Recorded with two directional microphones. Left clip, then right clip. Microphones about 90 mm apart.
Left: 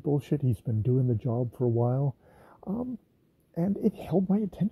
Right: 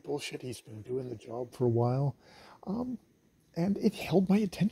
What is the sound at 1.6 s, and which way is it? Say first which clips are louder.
Speech: even; 20° left (ahead or behind).